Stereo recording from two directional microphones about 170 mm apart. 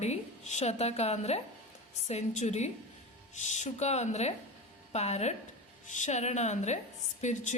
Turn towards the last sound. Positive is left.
turn(degrees=45)  # may be behind; listen again after turning